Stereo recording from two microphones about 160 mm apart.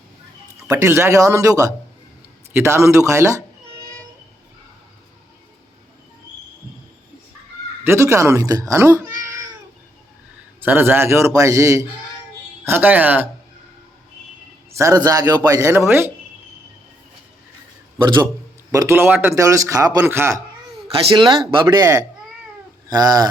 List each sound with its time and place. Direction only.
0.7 s speech: 15° right (ahead or behind)
7.9 s speech: 20° right (ahead or behind)
10.6 s speech: 10° right (ahead or behind)
14.8 s speech: 20° right (ahead or behind)
18.0 s speech: 30° right (ahead or behind)
18.7 s speech: 15° right (ahead or behind)
20.9 s speech: 30° right (ahead or behind)